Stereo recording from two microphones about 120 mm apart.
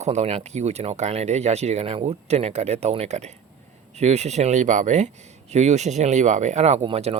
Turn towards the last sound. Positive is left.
turn(degrees=-55)  # may be behind; listen again after turning